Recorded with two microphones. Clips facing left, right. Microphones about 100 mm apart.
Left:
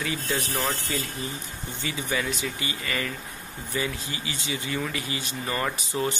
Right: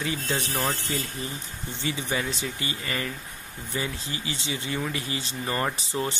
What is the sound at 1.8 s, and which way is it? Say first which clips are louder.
Speech: even; 25° right (ahead or behind).